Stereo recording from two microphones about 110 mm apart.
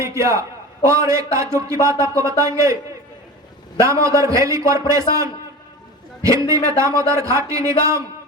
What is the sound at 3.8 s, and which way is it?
A man's voice, 30° right (ahead or behind).